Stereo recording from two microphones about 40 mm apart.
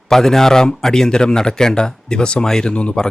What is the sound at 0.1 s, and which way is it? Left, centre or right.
Speech, centre.